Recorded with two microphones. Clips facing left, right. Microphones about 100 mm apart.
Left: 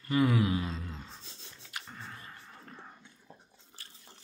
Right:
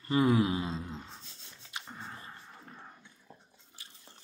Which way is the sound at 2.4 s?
5° right (ahead or behind).